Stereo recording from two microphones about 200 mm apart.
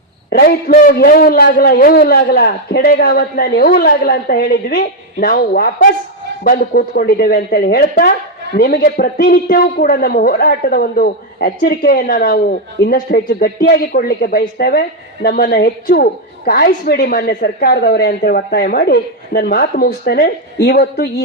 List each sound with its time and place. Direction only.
0.3 s speech: 50° left (ahead or behind)